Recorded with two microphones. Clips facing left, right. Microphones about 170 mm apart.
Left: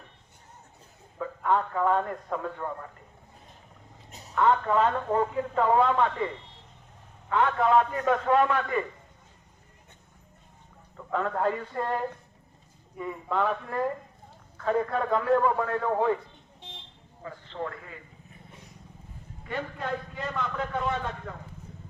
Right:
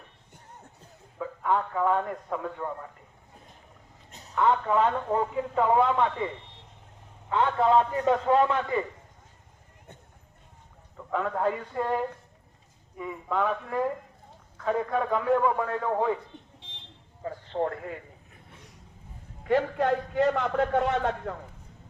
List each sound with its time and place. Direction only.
1.2 s a man's voice: 5° right (ahead or behind)
4.4 s a man's voice: 10° right (ahead or behind)
7.3 s a man's voice: 25° right (ahead or behind)
10.9 s a sound: 5° right (ahead or behind)
11.4 s a man's voice: 10° right (ahead or behind)
17.2 s a man's voice: 45° right (ahead or behind)
19.5 s a man's voice: 75° right (ahead or behind)